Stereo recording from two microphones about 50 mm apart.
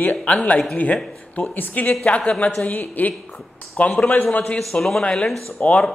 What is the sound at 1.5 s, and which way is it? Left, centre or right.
Speech, left.